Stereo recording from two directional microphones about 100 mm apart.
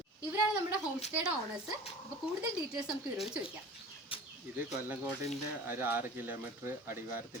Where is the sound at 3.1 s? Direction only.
5° right (ahead or behind).